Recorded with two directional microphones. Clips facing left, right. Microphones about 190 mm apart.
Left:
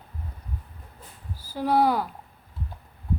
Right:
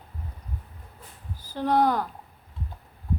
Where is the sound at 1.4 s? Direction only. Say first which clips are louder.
Left 1 dB; 10° left (ahead or behind).